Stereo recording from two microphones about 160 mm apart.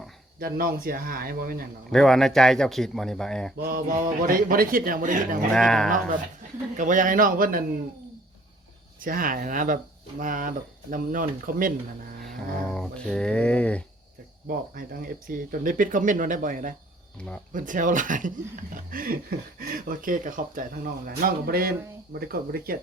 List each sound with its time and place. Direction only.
0.3 s speech: 65° right (ahead or behind)
1.9 s speech: 5° left (ahead or behind)
3.6 s speech: 60° right (ahead or behind)
5.5 s speech: 5° left (ahead or behind)
6.7 s speech: 55° right (ahead or behind)
9.0 s speech: 60° right (ahead or behind)
12.2 s speech: centre (ahead or behind)
14.4 s speech: 60° right (ahead or behind)